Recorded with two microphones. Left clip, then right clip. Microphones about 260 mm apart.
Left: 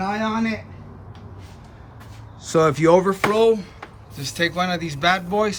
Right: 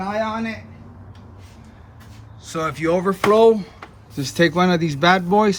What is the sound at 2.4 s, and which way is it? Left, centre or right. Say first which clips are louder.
Speech: left 6 dB; centre.